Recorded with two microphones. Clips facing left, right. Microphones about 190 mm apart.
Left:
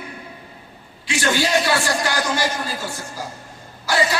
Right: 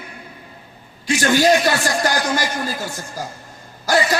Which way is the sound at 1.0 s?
45° right (ahead or behind).